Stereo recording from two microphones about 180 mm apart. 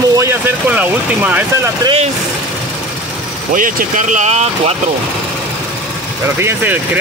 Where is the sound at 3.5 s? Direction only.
45° right (ahead or behind).